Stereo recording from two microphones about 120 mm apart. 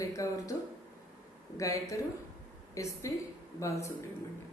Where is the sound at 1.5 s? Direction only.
25° left (ahead or behind).